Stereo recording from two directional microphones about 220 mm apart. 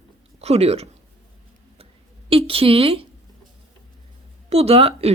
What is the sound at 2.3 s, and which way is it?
Speech, 25° right (ahead or behind).